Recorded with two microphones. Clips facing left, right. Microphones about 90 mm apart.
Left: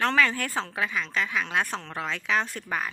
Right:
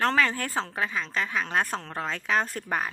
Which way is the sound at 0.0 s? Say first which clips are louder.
Even; 35° right (ahead or behind).